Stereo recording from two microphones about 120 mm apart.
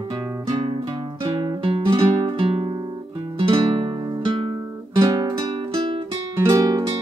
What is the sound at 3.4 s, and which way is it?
Music, 50° right (ahead or behind).